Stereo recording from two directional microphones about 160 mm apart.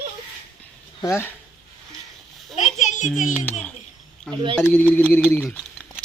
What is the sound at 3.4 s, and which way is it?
Speech, 10° left (ahead or behind).